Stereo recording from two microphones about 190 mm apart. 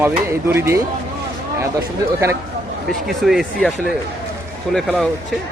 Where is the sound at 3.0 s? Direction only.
Centre (ahead or behind).